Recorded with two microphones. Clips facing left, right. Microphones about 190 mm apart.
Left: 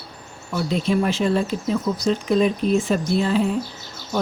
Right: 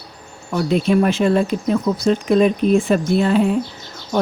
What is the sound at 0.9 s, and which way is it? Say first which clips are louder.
Speech: right 4 dB; 60° right (ahead or behind).